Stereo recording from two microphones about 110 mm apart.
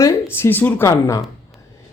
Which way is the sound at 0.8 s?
30° left (ahead or behind).